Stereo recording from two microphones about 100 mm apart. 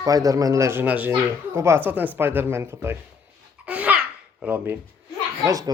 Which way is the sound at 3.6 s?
15° right (ahead or behind).